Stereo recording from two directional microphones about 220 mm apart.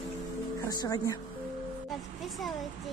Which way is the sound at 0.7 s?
15° left (ahead or behind).